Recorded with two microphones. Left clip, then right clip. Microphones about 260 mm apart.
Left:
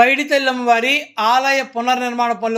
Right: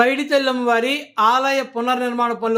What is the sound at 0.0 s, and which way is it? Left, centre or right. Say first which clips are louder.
Speech: left 3 dB; centre.